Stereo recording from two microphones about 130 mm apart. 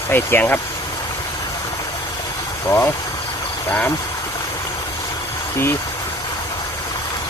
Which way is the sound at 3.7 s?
15° left (ahead or behind).